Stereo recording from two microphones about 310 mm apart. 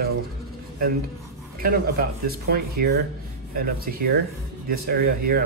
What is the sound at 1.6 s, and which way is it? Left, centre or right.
Speech, right.